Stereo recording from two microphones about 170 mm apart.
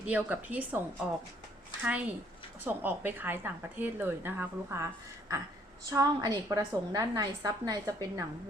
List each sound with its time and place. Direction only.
0.0 s a woman's voice: 10° right (ahead or behind)
5.9 s a woman's voice: 20° right (ahead or behind)